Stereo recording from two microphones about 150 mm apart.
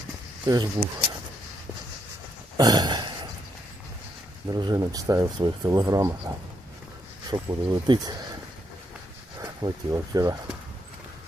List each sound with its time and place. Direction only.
0.4 s speech: 25° right (ahead or behind)
2.6 s a sound: 25° right (ahead or behind)
4.4 s speech: 25° right (ahead or behind)
9.4 s speech: 25° right (ahead or behind)